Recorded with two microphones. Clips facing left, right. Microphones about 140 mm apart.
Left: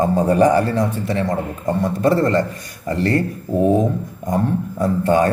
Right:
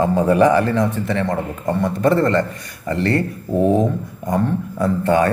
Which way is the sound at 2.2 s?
40° left (ahead or behind).